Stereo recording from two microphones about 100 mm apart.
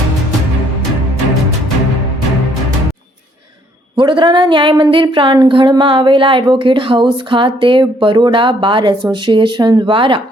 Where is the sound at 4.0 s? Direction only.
50° right (ahead or behind).